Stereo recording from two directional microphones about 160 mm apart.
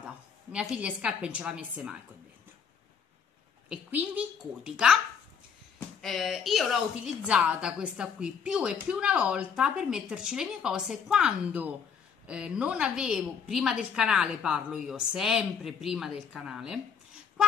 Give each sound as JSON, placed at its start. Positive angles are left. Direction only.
{"t": 0.0, "sound": "a woman's voice", "side_deg": -5}
{"t": 3.6, "sound": "a woman's voice", "side_deg": -5}
{"t": 5.9, "sound": "a woman's voice", "side_deg": 0}